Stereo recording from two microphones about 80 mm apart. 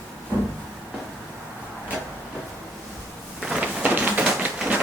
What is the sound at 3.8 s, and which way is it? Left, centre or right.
Tap, centre.